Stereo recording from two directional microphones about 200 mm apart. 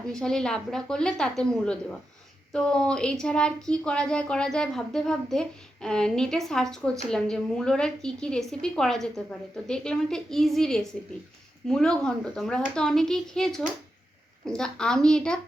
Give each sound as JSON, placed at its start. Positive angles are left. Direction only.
{"t": 0.1, "sound": "speech", "side_deg": 5}